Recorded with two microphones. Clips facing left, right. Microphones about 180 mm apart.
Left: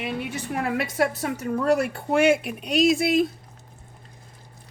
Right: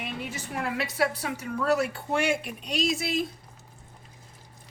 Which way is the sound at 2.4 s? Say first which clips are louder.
Left 8 dB; 60° left (ahead or behind).